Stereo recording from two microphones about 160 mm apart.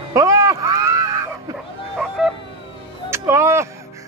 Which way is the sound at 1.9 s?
Centre (ahead or behind).